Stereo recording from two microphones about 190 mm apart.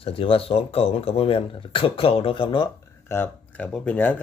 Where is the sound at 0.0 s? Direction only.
30° left (ahead or behind).